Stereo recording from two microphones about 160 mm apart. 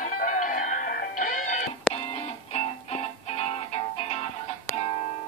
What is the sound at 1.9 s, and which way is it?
Music, 40° left (ahead or behind).